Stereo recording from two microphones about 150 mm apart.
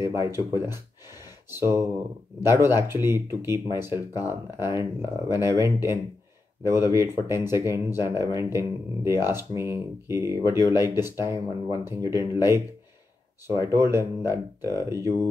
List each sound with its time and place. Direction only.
0.0 s speech: 20° right (ahead or behind)
13.7 s speech: 20° right (ahead or behind)